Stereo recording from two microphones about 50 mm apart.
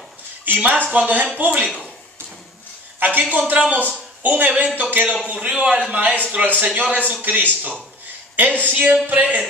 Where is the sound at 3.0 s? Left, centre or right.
Right.